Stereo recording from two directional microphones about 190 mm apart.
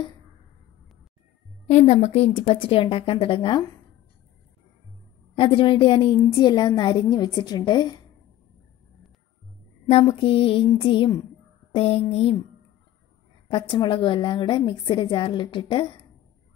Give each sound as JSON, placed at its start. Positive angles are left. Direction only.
{"t": 1.7, "sound": "a woman's voice", "side_deg": 35}
{"t": 5.3, "sound": "a woman's voice", "side_deg": 25}
{"t": 10.0, "sound": "a woman's voice", "side_deg": 25}
{"t": 11.7, "sound": "a sound", "side_deg": 30}
{"t": 13.5, "sound": "a woman's voice", "side_deg": 25}